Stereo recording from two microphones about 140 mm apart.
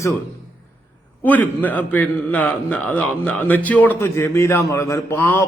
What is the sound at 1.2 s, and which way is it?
A man's voice, 10° left (ahead or behind).